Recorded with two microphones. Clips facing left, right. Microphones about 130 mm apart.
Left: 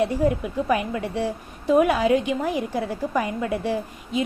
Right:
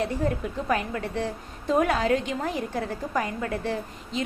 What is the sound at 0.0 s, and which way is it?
A woman's voice, 15° left (ahead or behind).